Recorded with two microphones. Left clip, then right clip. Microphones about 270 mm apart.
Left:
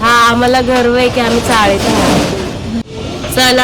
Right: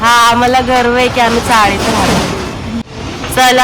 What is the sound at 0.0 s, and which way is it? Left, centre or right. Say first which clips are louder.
A woman's voice: right 1 dB; centre.